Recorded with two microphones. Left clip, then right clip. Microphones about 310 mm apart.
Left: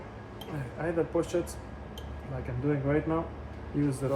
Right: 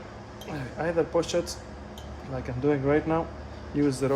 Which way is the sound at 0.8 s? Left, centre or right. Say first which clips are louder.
Right 4 dB; right.